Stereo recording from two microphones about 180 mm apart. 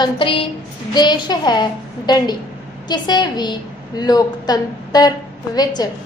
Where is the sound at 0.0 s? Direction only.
30° left (ahead or behind).